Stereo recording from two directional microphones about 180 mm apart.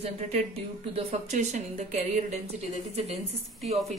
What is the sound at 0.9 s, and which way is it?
Speech, 40° right (ahead or behind).